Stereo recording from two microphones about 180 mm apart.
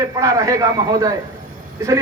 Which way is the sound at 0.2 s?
20° right (ahead or behind).